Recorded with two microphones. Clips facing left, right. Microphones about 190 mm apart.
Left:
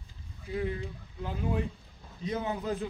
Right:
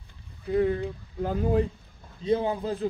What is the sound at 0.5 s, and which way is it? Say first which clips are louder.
A man's voice: right 9 dB; 55° right (ahead or behind).